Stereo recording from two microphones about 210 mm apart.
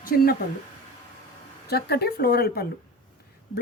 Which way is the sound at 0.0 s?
45° left (ahead or behind).